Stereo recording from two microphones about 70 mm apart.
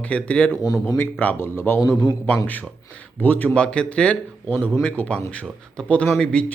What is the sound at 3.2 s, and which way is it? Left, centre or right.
Speech, left.